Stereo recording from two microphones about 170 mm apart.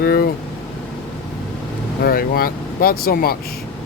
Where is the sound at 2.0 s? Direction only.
60° left (ahead or behind).